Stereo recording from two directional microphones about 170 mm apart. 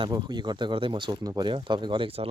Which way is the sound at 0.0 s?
25° right (ahead or behind).